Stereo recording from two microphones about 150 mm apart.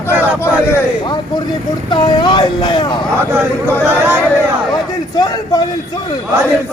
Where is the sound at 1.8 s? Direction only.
30° left (ahead or behind).